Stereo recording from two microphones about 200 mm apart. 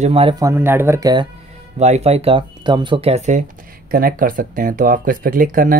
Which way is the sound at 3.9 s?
45° right (ahead or behind).